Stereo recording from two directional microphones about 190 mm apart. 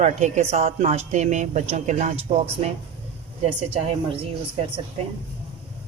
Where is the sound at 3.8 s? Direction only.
30° right (ahead or behind).